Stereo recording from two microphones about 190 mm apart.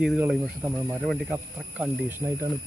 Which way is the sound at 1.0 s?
Centre (ahead or behind).